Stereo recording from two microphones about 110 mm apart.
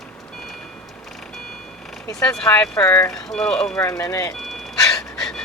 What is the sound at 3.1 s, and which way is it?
Speech, 5° left (ahead or behind).